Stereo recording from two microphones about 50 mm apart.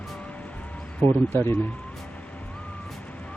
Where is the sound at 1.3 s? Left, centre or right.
Left.